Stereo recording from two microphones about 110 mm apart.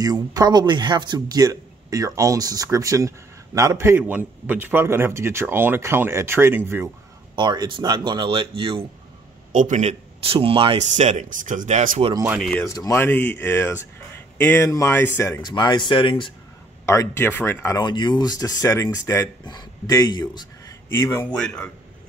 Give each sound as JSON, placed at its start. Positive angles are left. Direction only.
{"t": 0.0, "sound": "speech", "side_deg": -35}
{"t": 7.3, "sound": "speech", "side_deg": -45}
{"t": 8.3, "sound": "speech", "side_deg": -55}
{"t": 9.8, "sound": "speech", "side_deg": -75}
{"t": 12.6, "sound": "speech", "side_deg": 30}
{"t": 12.9, "sound": "speech", "side_deg": 20}
{"t": 15.4, "sound": "speech", "side_deg": 45}
{"t": 16.8, "sound": "speech", "side_deg": 25}
{"t": 17.7, "sound": "speech", "side_deg": 45}
{"t": 20.9, "sound": "speech", "side_deg": 25}
{"t": 21.3, "sound": "a man's voice", "side_deg": 10}